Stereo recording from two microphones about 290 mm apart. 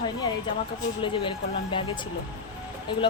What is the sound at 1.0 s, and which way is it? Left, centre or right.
Speech, centre.